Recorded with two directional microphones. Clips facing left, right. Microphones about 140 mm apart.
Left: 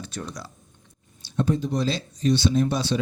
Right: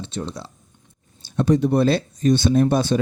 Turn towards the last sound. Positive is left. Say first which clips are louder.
# right 6 dB
turn(degrees=-50)  # may be behind; listen again after turning